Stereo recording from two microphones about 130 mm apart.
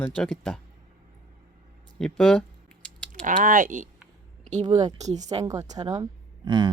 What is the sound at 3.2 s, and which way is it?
Speech, 90° right.